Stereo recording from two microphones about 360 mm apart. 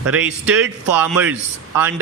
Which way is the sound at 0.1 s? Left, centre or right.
Centre.